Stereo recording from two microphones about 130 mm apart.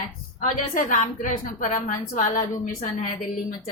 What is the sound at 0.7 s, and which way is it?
A woman's voice, 80° left.